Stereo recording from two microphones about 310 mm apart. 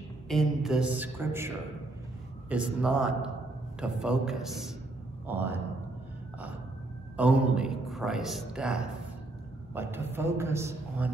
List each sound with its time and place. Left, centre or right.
0.3 s a man's voice: centre
2.5 s a man's voice: centre
7.2 s a man's voice: centre